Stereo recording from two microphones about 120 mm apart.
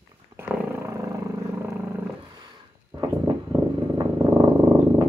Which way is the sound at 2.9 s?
30° right (ahead or behind).